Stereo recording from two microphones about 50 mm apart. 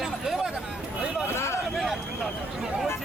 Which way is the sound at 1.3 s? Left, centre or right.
Left.